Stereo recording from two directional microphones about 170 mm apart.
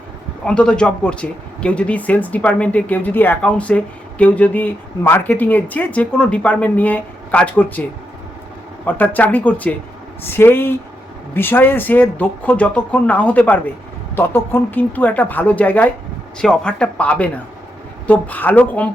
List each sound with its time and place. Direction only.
0.4 s speech: 5° left (ahead or behind)
8.9 s speech: 10° left (ahead or behind)